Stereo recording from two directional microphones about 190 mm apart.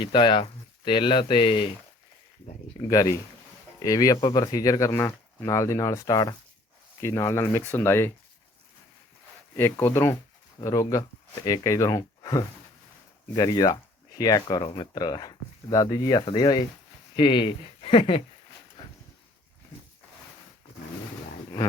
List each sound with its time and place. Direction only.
0.0 s speech: 25° left (ahead or behind)
2.8 s speech: 20° left (ahead or behind)
9.6 s speech: 10° left (ahead or behind); by 18.2 s 30° left (ahead or behind)
18.8 s a sound: 20° left (ahead or behind)